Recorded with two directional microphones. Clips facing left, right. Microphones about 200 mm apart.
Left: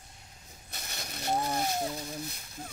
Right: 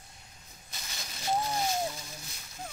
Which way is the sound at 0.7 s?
60° left (ahead or behind).